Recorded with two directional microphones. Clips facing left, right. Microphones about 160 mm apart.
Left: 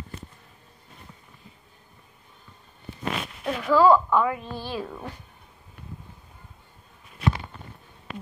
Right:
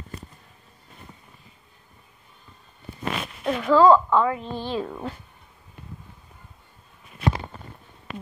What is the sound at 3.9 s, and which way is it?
A woman's voice, 25° right (ahead or behind).